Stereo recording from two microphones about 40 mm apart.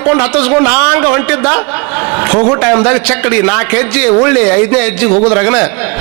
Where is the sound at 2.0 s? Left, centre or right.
Centre.